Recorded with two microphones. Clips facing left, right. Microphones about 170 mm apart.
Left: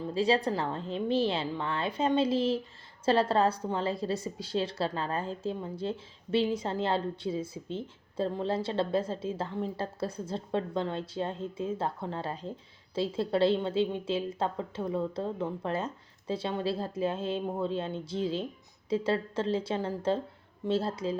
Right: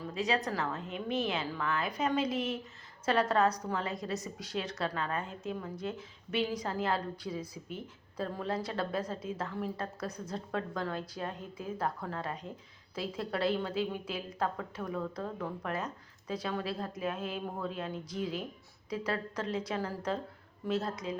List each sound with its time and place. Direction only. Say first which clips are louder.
0.0 s a woman's voice: left 6 dB; 30° left (ahead or behind)